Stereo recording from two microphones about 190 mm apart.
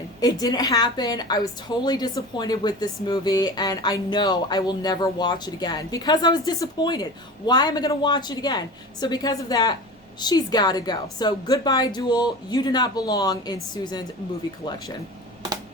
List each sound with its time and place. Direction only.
0.2 s a woman's voice: 20° left (ahead or behind)